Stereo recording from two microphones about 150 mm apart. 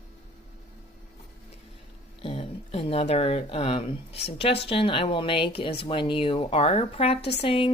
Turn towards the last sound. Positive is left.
turn(degrees=35)  # may be behind; listen again after turning